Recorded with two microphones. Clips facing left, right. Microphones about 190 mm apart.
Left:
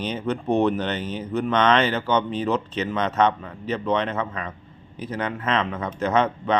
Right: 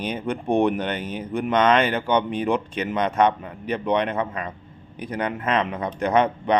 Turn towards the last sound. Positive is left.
turn(degrees=-15)  # may be behind; listen again after turning